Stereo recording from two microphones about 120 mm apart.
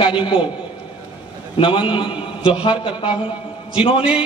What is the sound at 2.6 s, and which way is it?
A man's voice, 45° left (ahead or behind).